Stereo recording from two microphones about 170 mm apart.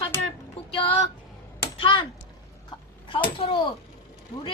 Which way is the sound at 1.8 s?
30° left (ahead or behind).